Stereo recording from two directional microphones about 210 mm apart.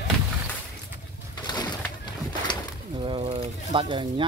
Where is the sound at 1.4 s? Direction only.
20° left (ahead or behind).